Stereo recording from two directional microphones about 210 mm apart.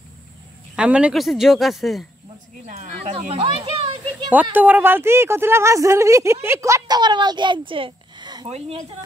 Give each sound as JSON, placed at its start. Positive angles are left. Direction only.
{"t": 0.7, "sound": "speech", "side_deg": -5}
{"t": 2.6, "sound": "speech", "side_deg": -30}
{"t": 4.3, "sound": "speech", "side_deg": -10}